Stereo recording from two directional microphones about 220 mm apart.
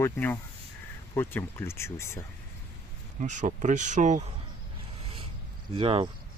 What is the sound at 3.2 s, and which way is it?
Speech, 35° right (ahead or behind).